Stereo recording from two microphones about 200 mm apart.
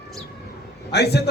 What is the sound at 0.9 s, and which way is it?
Speech, 55° left (ahead or behind).